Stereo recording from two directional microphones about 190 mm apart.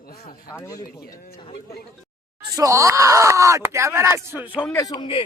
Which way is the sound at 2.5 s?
15° right (ahead or behind).